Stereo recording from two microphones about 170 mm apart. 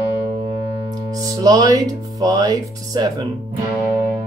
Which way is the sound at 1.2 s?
20° right (ahead or behind).